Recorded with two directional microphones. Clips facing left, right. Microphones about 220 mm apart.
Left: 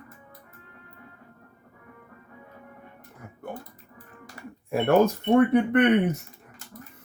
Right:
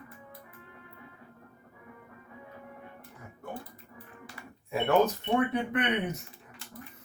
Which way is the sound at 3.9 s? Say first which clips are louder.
Left 1 dB; 45° left (ahead or behind).